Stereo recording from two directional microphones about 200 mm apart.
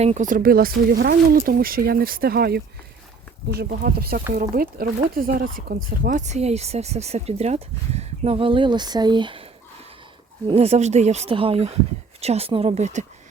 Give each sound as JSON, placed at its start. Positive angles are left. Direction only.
{"t": 0.0, "sound": "speech", "side_deg": -35}